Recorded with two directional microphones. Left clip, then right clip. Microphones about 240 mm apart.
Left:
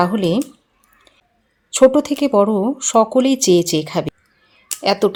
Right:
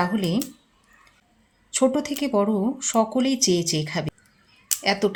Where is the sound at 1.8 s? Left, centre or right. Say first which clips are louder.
Left 10 dB; left.